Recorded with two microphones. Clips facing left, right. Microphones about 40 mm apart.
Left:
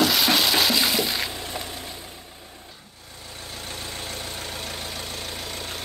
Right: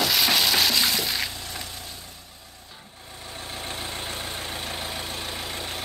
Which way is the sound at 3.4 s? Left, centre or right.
Right.